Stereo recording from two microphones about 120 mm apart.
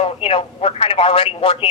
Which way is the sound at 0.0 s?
50° left (ahead or behind).